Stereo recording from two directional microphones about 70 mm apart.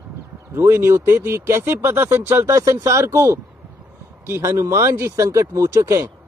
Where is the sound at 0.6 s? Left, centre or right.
Right.